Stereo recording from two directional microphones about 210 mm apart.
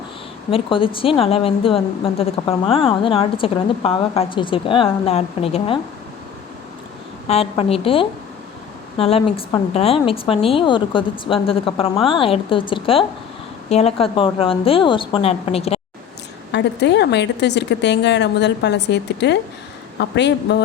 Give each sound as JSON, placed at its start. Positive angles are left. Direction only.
{"t": 0.5, "sound": "a woman's voice", "side_deg": 25}
{"t": 7.3, "sound": "a woman's voice", "side_deg": 30}
{"t": 16.5, "sound": "a woman's voice", "side_deg": 55}